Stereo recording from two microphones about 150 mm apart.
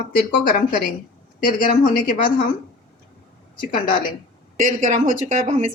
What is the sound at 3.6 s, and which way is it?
Speech, 70° left (ahead or behind).